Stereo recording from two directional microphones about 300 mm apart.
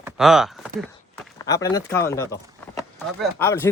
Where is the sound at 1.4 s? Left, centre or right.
Centre.